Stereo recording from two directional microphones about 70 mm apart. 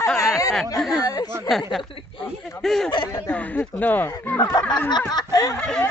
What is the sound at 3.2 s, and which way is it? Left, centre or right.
Speech, left.